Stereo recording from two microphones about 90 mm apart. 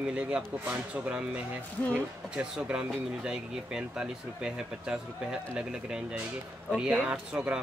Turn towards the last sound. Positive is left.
turn(degrees=-15)  # may be behind; listen again after turning